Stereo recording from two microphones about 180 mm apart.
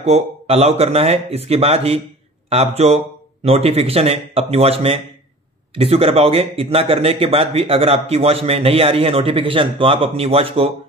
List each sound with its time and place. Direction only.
0.0 s speech: 35° right (ahead or behind)